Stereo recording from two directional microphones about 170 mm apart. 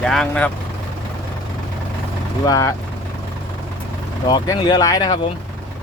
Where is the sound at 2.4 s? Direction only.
20° left (ahead or behind).